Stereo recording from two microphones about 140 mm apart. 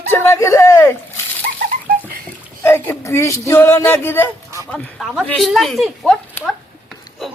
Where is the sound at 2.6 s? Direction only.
15° left (ahead or behind).